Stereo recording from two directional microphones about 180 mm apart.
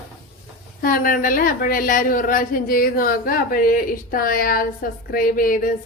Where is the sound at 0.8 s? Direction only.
50° left (ahead or behind).